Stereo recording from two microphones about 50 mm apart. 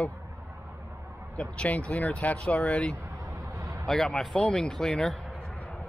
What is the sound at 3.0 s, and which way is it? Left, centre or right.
Vehicle, right.